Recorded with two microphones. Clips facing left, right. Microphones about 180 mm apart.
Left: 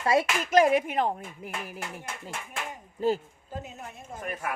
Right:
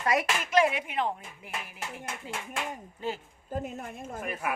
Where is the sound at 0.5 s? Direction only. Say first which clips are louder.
Left 4 dB; 45° left (ahead or behind).